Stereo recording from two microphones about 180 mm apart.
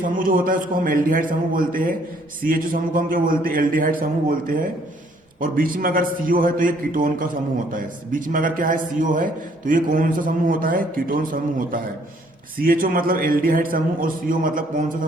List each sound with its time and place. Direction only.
0.0 s a man's voice: 50° right (ahead or behind)